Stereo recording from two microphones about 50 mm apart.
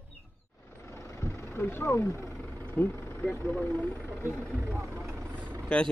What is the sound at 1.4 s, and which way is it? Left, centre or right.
Speech, left.